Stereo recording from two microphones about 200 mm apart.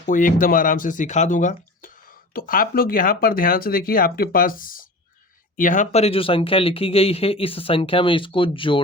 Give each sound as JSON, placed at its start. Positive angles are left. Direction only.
{"t": 0.0, "sound": "speech", "side_deg": 40}